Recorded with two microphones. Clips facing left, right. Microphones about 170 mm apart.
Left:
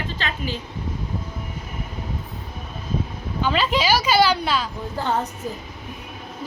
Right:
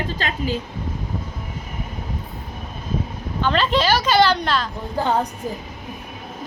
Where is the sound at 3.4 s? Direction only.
10° left (ahead or behind).